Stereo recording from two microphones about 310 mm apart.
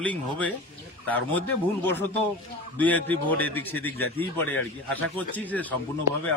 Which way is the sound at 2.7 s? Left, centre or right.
Centre.